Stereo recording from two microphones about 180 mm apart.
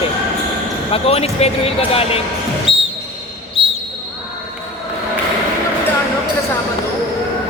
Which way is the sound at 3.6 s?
30° left (ahead or behind).